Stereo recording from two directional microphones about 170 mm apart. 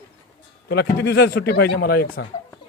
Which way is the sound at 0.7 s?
70° left (ahead or behind).